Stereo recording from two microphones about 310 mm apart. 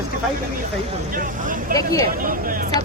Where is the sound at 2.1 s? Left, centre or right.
Right.